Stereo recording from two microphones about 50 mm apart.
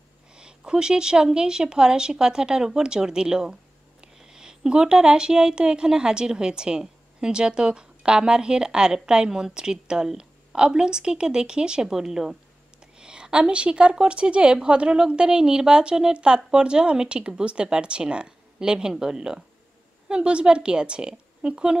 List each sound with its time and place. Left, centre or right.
0.3 s a woman's voice: centre